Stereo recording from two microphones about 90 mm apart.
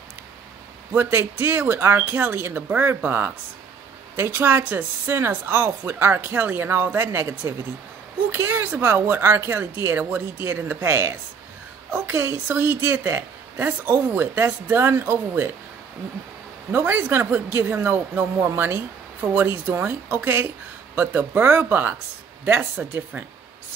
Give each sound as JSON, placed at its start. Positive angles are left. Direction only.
{"t": 0.9, "sound": "a woman's voice", "side_deg": -25}
{"t": 16.7, "sound": "a woman's voice", "side_deg": -25}
{"t": 19.3, "sound": "a woman's voice", "side_deg": -25}